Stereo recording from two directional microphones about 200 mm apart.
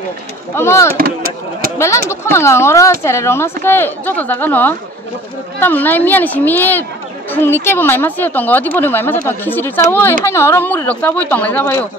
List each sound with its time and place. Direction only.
0.6 s speech: 15° left (ahead or behind)
0.9 s speech: 50° right (ahead or behind)
1.8 s speech: 15° left (ahead or behind)